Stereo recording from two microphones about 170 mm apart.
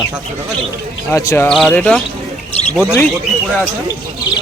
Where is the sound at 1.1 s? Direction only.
15° left (ahead or behind).